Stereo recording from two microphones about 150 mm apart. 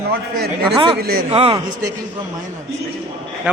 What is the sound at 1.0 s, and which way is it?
Speech, 90° right.